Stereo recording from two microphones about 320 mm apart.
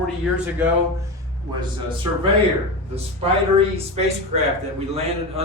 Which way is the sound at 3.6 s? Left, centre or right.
Centre.